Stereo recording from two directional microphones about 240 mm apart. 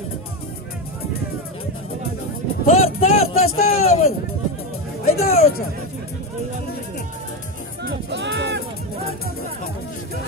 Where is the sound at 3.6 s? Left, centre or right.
Left.